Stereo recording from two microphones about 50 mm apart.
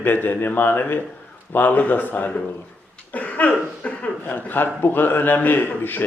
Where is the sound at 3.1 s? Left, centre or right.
Left.